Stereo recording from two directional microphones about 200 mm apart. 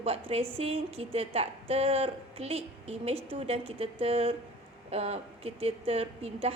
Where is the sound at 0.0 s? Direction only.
30° right (ahead or behind).